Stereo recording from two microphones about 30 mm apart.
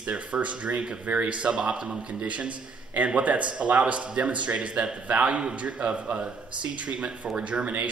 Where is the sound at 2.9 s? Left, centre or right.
Right.